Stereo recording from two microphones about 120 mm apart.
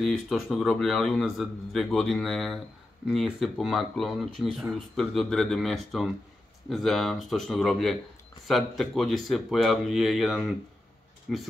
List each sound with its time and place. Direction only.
0.0 s speech: 5° left (ahead or behind)